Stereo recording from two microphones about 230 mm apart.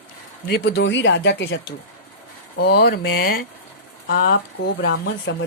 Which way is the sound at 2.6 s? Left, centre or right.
Left.